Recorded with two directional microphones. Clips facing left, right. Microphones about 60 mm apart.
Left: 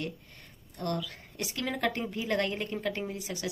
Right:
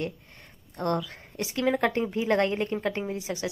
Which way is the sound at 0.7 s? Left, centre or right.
Right.